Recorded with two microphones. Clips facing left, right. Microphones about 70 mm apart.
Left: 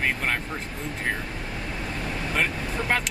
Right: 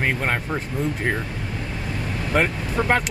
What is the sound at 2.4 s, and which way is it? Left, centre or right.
Speech, right.